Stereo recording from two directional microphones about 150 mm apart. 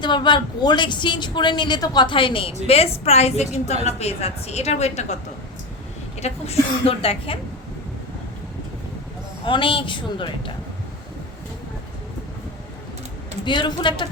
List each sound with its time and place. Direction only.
0.0 s a woman's voice: 30° left (ahead or behind); by 5.1 s 50° left (ahead or behind)
6.1 s a woman's voice: 45° left (ahead or behind)
9.5 s a woman's voice: 35° left (ahead or behind)
13.4 s a woman's voice: 30° left (ahead or behind)